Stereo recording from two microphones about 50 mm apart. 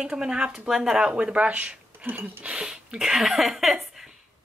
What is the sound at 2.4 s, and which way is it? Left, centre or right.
Speech, centre.